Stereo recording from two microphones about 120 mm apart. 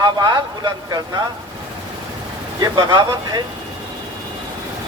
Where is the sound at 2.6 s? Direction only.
35° right (ahead or behind).